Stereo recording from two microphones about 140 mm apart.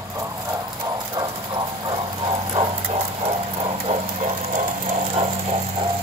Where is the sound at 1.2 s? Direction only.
35° right (ahead or behind); by 5.0 s 55° right (ahead or behind).